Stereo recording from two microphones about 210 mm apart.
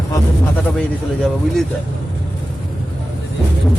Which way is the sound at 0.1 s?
5° left (ahead or behind).